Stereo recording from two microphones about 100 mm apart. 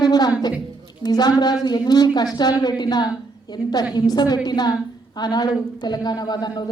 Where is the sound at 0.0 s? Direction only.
45° left (ahead or behind).